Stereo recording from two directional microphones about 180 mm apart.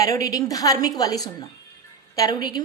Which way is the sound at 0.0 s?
20° left (ahead or behind).